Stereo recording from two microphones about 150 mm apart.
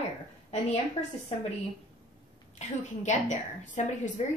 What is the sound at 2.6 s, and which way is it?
A woman's voice, 50° left (ahead or behind).